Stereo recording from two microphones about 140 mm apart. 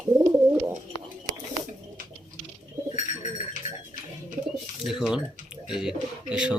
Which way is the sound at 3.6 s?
60° left (ahead or behind).